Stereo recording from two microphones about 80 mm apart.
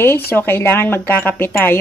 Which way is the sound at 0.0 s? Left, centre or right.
Left.